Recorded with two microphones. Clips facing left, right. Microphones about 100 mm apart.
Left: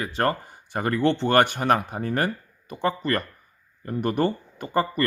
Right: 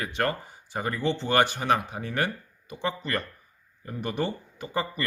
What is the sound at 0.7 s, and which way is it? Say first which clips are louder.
Speech: left 6 dB; 60° left (ahead or behind).